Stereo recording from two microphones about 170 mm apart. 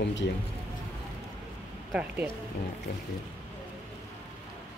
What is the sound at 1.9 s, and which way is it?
Speech, 5° right (ahead or behind).